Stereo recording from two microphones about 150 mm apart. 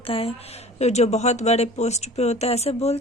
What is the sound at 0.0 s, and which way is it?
Speech, 40° left (ahead or behind).